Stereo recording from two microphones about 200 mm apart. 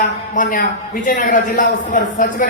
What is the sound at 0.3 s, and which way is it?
A man's voice, 40° left (ahead or behind).